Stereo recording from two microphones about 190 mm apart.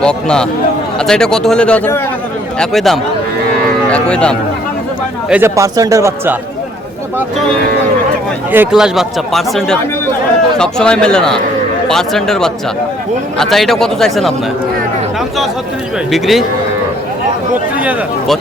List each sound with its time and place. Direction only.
0.0 s speech: 5° left (ahead or behind)
5.3 s speech: 15° right (ahead or behind)
8.5 s speech: 5° right (ahead or behind)
16.1 s speech: centre (ahead or behind)
17.7 s speech: 10° right (ahead or behind)